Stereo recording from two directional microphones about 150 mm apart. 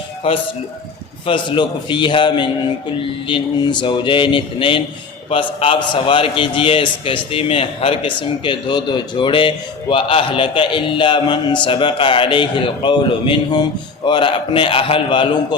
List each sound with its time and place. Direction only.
1.3 s a man's voice: 30° left (ahead or behind)